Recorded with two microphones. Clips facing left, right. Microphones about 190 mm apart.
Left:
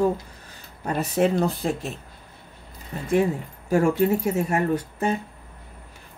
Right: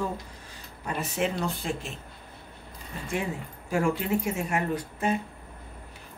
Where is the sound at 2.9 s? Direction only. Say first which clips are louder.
Left 10 dB; 40° left (ahead or behind).